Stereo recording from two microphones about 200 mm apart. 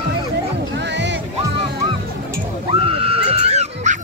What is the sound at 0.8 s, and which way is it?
Music, 60° right (ahead or behind).